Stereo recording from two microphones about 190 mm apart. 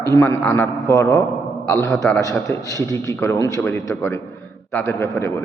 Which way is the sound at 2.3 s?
10° left (ahead or behind).